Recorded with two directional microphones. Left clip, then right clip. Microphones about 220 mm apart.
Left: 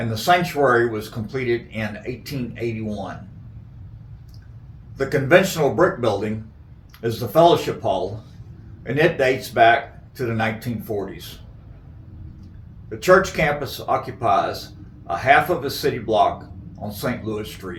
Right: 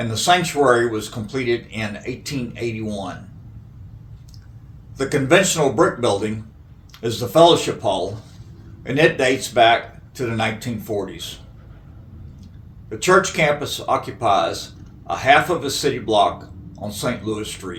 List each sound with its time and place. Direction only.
0.1 s speech: 40° right (ahead or behind)
4.9 s speech: 40° right (ahead or behind)
13.0 s speech: 40° right (ahead or behind)